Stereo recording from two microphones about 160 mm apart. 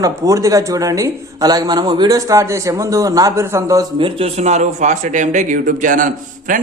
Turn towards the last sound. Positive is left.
turn(degrees=-55)  # may be behind; listen again after turning